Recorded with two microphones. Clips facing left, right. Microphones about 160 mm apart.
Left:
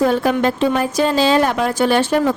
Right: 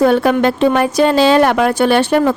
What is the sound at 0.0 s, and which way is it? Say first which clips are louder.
A woman's voice: right 4 dB; 70° right (ahead or behind).